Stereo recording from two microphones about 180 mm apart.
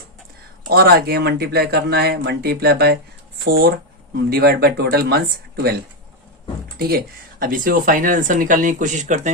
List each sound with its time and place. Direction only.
0.7 s speech: 60° right (ahead or behind)
6.7 s speech: 60° right (ahead or behind); by 9.3 s 40° right (ahead or behind)